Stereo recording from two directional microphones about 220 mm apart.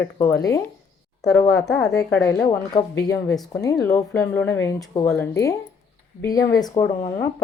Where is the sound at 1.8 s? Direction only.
15° left (ahead or behind).